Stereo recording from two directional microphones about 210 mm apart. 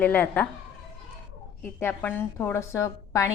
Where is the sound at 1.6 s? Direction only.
10° left (ahead or behind).